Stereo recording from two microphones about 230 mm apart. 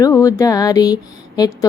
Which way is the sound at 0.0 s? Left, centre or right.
Centre.